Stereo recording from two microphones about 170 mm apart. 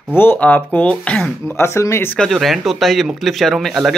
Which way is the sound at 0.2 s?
10° left (ahead or behind).